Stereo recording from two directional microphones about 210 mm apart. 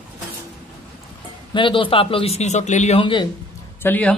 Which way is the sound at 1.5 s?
25° left (ahead or behind).